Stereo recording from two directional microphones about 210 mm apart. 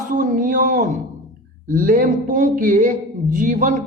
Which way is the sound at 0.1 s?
40° right (ahead or behind).